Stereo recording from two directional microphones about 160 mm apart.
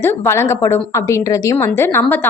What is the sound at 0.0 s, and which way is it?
A woman's voice, 15° left (ahead or behind).